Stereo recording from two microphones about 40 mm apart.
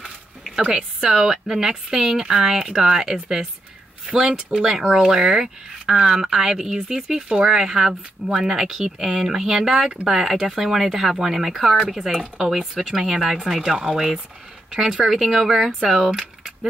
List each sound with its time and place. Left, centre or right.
0.6 s speech: centre